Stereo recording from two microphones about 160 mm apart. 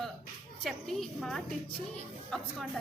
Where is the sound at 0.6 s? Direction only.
Centre (ahead or behind).